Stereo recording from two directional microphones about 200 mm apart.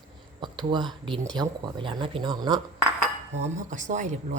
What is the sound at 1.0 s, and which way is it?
Speech, 20° right (ahead or behind).